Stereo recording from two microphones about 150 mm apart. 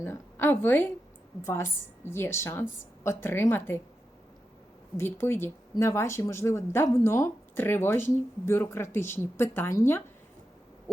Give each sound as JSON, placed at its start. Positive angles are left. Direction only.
{"t": 0.0, "sound": "a woman's voice", "side_deg": 15}
{"t": 4.9, "sound": "speech", "side_deg": 15}